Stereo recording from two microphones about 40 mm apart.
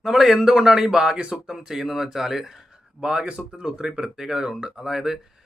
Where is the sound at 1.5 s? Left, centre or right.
Centre.